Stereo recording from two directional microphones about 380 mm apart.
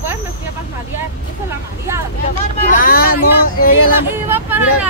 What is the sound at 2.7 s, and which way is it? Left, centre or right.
Speech, left.